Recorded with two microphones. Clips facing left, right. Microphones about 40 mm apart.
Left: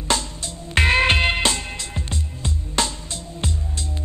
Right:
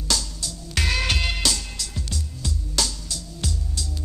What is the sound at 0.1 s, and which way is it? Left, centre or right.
Music, left.